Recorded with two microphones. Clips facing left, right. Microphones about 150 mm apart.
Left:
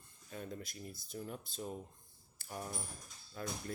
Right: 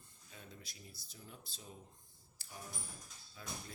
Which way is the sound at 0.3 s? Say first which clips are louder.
Left 11 dB; 55° left (ahead or behind).